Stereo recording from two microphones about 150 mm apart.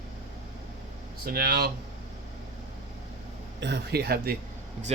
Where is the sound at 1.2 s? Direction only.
90° right.